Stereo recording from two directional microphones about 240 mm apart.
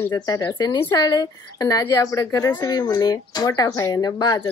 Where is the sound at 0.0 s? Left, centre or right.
Centre.